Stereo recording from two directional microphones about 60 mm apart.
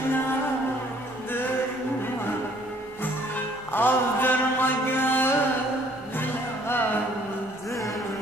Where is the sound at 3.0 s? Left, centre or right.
Left.